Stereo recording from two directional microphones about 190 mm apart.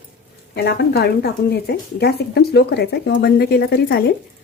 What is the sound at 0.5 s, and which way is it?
A woman's voice, 60° left (ahead or behind).